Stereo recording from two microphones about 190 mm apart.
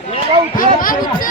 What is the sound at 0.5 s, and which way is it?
Basketball bounce, 45° left (ahead or behind).